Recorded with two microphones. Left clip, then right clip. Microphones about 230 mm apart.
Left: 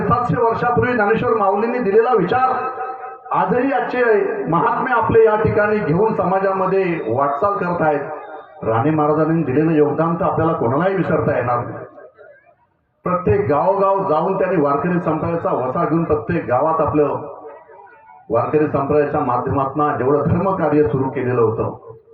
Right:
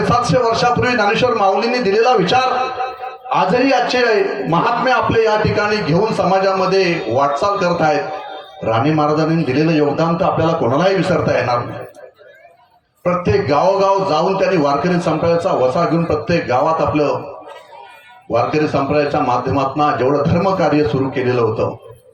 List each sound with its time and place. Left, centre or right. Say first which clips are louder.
0.1 s a man's voice: right 1 dB; right
13.1 s a man's voice: right 1 dB; right
18.5 s a man's voice: even; right